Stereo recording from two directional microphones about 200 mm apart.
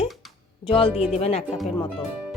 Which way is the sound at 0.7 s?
25° left (ahead or behind).